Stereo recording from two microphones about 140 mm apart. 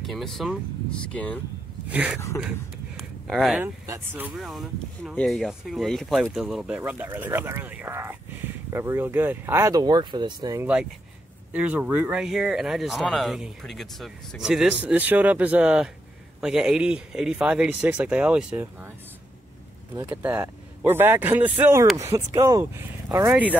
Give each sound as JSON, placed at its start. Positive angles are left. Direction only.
{"t": 0.0, "sound": "speech", "side_deg": 0}
{"t": 1.9, "sound": "speech", "side_deg": -10}
{"t": 3.0, "sound": "a sound", "side_deg": 0}
{"t": 3.8, "sound": "speech", "side_deg": -15}
{"t": 4.4, "sound": "speech", "side_deg": 0}
{"t": 10.6, "sound": "speech", "side_deg": -5}
{"t": 20.0, "sound": "speech", "side_deg": -15}
{"t": 23.1, "sound": "speech", "side_deg": -15}